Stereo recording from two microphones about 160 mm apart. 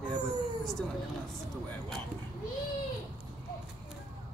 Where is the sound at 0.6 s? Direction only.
Centre (ahead or behind).